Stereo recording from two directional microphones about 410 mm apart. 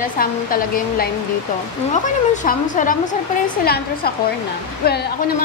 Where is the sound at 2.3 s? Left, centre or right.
Centre.